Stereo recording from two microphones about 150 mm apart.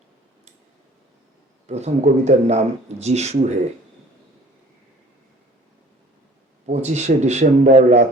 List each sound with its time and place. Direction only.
1.6 s speech: 45° right (ahead or behind)
6.7 s speech: 50° right (ahead or behind)